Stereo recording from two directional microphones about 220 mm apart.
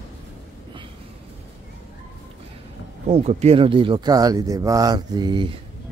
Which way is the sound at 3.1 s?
30° right (ahead or behind).